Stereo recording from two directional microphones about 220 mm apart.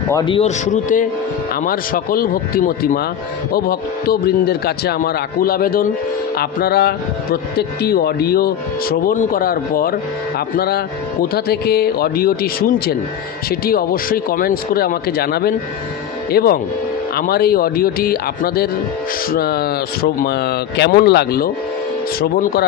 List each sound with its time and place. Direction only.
0.1 s a man's voice: 20° left (ahead or behind); by 9.9 s 40° left (ahead or behind)
11.3 s a man's voice: 45° left (ahead or behind)